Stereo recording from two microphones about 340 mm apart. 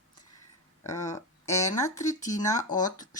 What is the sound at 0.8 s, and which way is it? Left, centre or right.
Speech, centre.